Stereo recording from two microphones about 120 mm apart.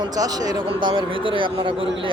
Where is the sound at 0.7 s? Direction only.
45° right (ahead or behind).